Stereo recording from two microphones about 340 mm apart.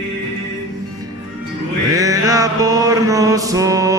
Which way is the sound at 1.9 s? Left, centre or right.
Centre.